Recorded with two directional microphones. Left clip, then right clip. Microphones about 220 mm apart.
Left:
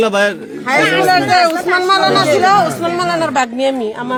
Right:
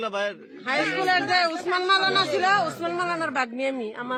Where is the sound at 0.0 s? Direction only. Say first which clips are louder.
Left 15 dB; 40° left (ahead or behind).